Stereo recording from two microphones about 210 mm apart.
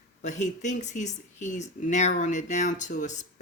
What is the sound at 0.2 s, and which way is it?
Speech, 35° left (ahead or behind).